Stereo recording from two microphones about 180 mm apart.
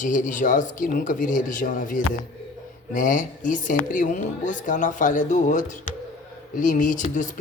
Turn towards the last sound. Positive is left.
turn(degrees=45)  # may be behind; listen again after turning